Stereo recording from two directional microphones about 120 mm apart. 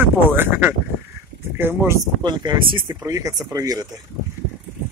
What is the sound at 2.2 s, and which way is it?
Speech, 40° right (ahead or behind).